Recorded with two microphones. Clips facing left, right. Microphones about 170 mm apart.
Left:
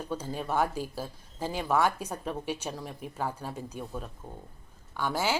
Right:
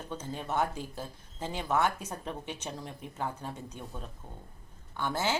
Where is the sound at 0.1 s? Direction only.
10° left (ahead or behind).